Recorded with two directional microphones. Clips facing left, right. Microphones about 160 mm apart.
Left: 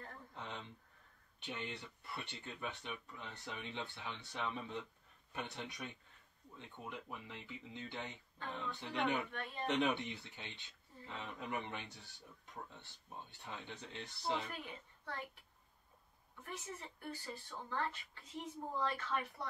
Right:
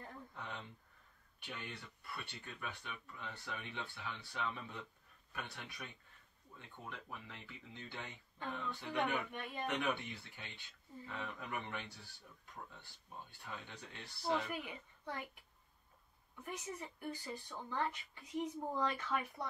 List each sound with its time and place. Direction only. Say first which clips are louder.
0.3 s a sound: left 2 dB; 20° left (ahead or behind)
1.4 s speech: left 3 dB; 20° left (ahead or behind)
9.3 s speech: even; 15° right (ahead or behind)
9.7 s speech: left 4 dB; 20° left (ahead or behind)
14.5 s a woman's voice: right 4 dB; 15° right (ahead or behind)
16.4 s speech: right 3 dB; 15° right (ahead or behind)